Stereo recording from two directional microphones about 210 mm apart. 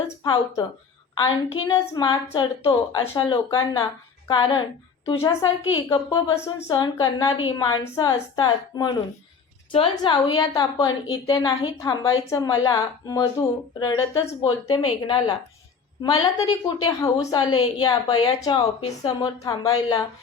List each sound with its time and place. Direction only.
0.2 s a woman's voice: 20° left (ahead or behind)